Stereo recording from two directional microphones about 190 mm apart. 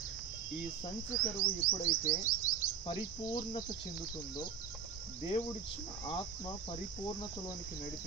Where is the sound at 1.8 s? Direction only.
45° left (ahead or behind).